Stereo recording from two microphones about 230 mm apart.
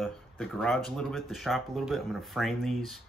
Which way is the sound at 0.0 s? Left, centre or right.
Centre.